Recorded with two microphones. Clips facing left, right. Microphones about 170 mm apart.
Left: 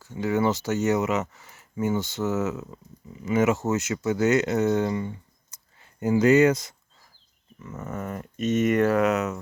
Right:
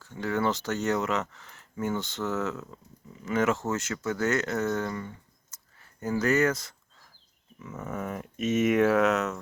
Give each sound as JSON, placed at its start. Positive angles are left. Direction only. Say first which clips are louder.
{"t": 0.0, "sound": "speech", "louder": "left 4 dB", "side_deg": 10}
{"t": 7.8, "sound": "speech", "louder": "left 1 dB", "side_deg": 5}